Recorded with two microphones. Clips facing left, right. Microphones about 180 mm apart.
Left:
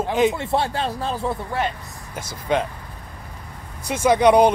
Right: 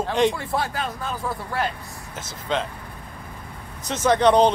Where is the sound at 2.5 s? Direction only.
10° left (ahead or behind).